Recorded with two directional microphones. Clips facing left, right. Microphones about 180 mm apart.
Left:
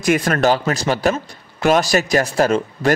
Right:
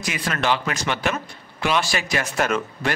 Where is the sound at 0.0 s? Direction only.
50° left (ahead or behind).